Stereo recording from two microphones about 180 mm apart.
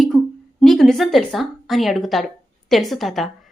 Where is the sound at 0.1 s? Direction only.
Centre (ahead or behind).